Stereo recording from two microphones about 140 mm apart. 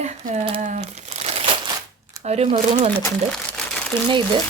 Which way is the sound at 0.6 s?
60° right (ahead or behind).